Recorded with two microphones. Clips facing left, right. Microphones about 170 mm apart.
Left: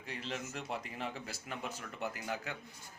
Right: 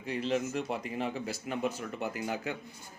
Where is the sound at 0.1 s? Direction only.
15° right (ahead or behind).